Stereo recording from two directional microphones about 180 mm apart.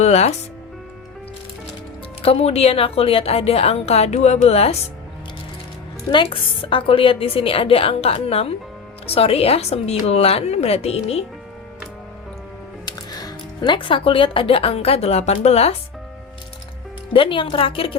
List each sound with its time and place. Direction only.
0.0 s a woman's voice: 40° left (ahead or behind)
2.2 s a woman's voice: 35° left (ahead or behind)
6.1 s a woman's voice: 30° left (ahead or behind)
12.8 s speech: 20° left (ahead or behind)
17.1 s speech: 30° left (ahead or behind)